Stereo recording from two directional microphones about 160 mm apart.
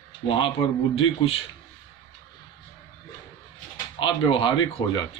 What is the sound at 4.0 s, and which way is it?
Speech, 35° left (ahead or behind).